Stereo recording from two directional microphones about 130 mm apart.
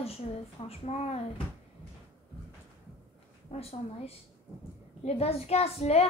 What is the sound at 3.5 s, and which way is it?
Speech, 55° left (ahead or behind).